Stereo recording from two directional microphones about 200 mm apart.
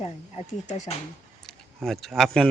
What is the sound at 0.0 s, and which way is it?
Speech, 30° left (ahead or behind).